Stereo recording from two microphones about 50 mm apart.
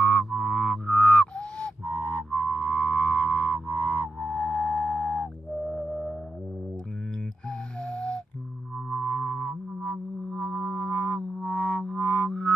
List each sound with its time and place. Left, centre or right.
0.0 s music: centre
4.3 s flute: centre
5.2 s music: centre
7.4 s music: centre